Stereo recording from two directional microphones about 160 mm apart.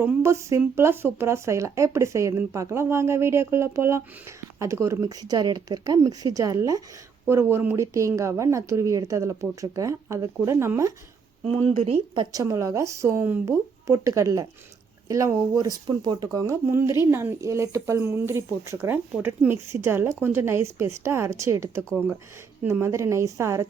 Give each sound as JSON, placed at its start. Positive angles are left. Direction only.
{"t": 0.0, "sound": "speech", "side_deg": -15}
{"t": 11.8, "sound": "speech", "side_deg": -35}